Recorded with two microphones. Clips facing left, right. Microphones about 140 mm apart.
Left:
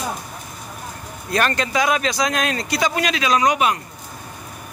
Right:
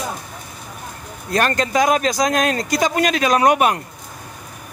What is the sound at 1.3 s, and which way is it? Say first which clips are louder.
Speech: right 2 dB; 40° right (ahead or behind).